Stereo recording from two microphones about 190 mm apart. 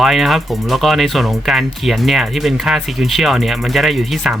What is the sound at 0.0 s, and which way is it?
Speech, centre (ahead or behind).